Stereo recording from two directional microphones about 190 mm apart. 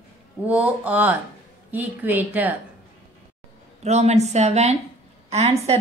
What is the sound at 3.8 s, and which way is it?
A woman's voice, 35° right (ahead or behind).